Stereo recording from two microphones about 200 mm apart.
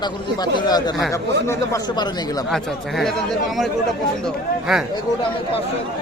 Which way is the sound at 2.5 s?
Centre (ahead or behind).